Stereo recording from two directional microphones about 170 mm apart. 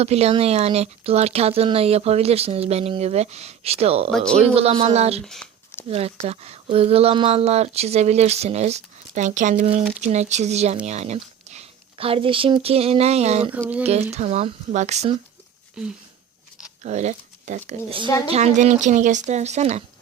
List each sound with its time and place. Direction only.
0.0 s speech: 35° right (ahead or behind)
5.2 s speech: 5° left (ahead or behind)
5.9 s speech: 35° right (ahead or behind)
15.8 s speech: 5° right (ahead or behind)
16.8 s speech: 40° right (ahead or behind)